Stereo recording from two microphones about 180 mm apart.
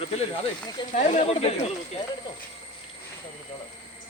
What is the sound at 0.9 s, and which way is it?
Speech, 35° left (ahead or behind).